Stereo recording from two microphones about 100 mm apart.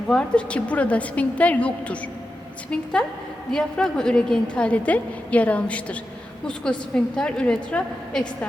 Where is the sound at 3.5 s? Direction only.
5° left (ahead or behind).